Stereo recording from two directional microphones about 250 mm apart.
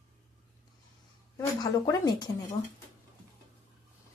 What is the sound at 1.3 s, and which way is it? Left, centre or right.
Speech, centre.